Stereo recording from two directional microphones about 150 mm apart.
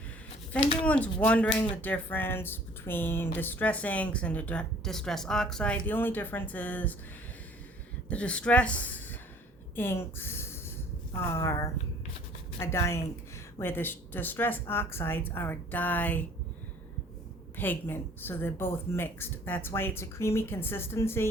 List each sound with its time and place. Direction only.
0.5 s speech: 10° left (ahead or behind)
8.0 s a woman's voice: 10° left (ahead or behind)
17.6 s speech: 15° left (ahead or behind)